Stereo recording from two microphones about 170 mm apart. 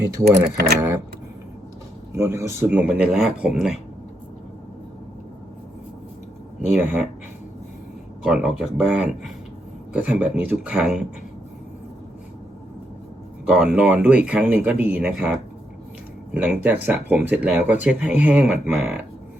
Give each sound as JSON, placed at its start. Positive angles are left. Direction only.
{"t": 0.0, "sound": "speech", "side_deg": -20}
{"t": 0.5, "sound": "speech", "side_deg": -65}
{"t": 2.1, "sound": "speech", "side_deg": -15}
{"t": 6.7, "sound": "speech", "side_deg": -5}
{"t": 8.2, "sound": "speech", "side_deg": -5}
{"t": 13.5, "sound": "speech", "side_deg": -5}